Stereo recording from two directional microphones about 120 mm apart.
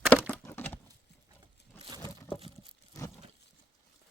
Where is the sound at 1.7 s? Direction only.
15° left (ahead or behind).